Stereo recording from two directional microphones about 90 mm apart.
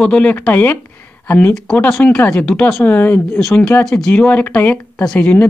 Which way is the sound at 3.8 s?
5° left (ahead or behind).